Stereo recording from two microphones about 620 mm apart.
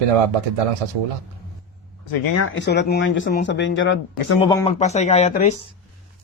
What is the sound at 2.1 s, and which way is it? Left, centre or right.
A man's voice, left.